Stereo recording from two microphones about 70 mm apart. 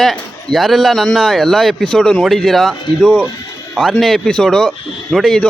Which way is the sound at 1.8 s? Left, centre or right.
Centre.